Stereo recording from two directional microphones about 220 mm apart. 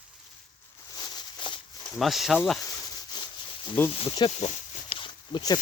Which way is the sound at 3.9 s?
25° left (ahead or behind).